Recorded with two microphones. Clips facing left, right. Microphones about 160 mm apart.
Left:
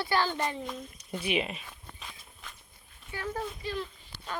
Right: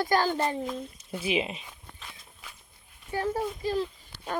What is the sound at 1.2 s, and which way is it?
Speech, 25° right (ahead or behind).